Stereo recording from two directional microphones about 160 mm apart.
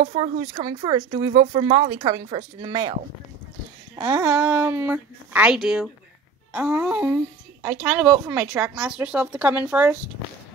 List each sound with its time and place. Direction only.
0.1 s speech: 35° right (ahead or behind)
4.0 s speech: 15° right (ahead or behind)